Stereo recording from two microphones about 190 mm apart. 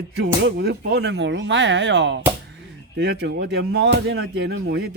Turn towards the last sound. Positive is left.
turn(degrees=-60)  # may be behind; listen again after turning